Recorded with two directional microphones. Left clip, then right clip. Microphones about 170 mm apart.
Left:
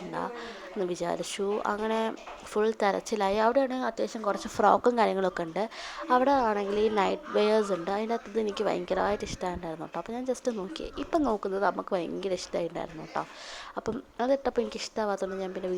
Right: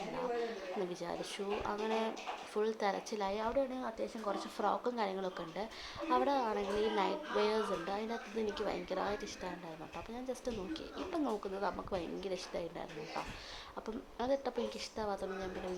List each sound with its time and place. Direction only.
0.9 s a woman's voice: 40° left (ahead or behind)